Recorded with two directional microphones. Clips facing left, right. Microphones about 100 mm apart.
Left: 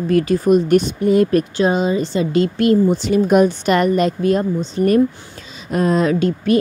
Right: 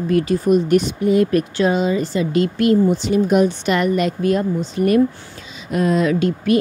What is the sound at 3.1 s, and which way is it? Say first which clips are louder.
Speech: left 3 dB; 50° left (ahead or behind).